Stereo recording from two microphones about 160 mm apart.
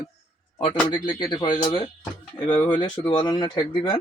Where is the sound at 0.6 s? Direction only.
30° left (ahead or behind).